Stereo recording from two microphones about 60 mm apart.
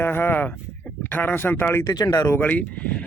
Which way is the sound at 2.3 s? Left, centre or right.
Left.